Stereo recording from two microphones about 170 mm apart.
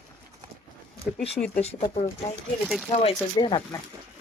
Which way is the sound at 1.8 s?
55° left (ahead or behind).